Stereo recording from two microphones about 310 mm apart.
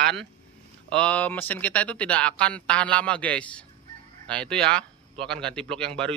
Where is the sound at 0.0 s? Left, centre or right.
Centre.